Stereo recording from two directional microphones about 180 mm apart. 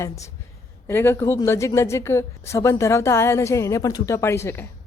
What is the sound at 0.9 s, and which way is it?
A woman's voice, 10° left (ahead or behind).